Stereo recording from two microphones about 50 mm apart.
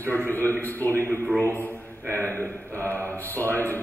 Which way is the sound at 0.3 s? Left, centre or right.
Left.